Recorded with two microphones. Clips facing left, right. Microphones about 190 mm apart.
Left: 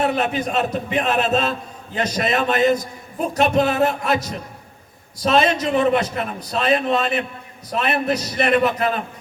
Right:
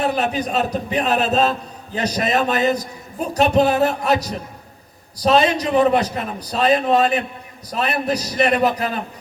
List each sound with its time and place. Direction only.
0.0 s a man's voice: 40° right (ahead or behind)
5.2 s a man's voice: 35° right (ahead or behind)